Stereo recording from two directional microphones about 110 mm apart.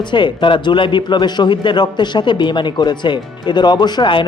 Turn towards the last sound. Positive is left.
turn(degrees=45)  # may be behind; listen again after turning